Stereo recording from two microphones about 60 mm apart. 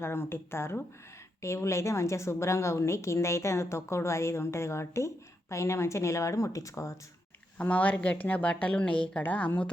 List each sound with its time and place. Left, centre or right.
0.0 s a woman's voice: left
7.6 s speech: left